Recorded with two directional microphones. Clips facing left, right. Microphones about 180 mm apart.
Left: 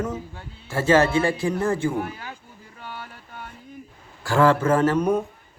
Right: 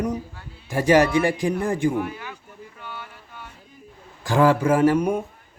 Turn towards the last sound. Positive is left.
turn(degrees=-10)  # may be behind; listen again after turning